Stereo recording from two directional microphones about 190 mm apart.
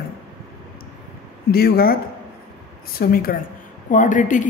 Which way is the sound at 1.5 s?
50° left (ahead or behind).